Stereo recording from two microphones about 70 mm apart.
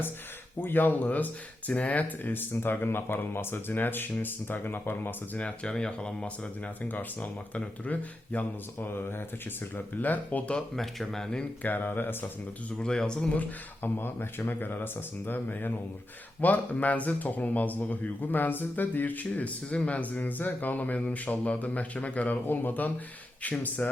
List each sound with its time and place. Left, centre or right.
0.6 s speech: left
5.4 s speech: centre
6.8 s speech: left
8.9 s speech: left
10.5 s speech: centre
11.6 s speech: left
12.8 s speech: centre
13.8 s speech: left